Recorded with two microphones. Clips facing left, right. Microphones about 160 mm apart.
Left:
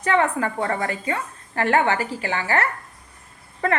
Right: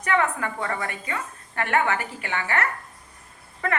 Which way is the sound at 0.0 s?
30° left (ahead or behind).